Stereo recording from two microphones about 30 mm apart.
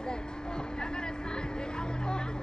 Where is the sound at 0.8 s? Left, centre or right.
Left.